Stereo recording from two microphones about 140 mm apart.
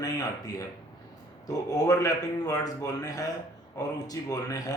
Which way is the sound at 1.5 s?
25° left (ahead or behind).